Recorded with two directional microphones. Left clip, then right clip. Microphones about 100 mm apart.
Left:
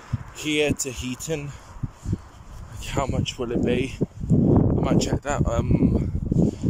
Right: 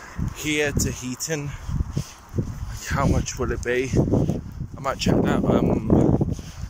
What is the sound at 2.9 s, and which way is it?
Speech, 25° left (ahead or behind).